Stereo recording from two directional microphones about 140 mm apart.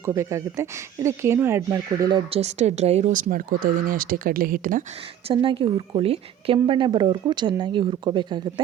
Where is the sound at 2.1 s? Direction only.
45° right (ahead or behind); by 4.8 s 75° right (ahead or behind).